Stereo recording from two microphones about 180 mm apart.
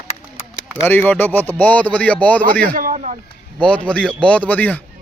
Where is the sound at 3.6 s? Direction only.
5° left (ahead or behind).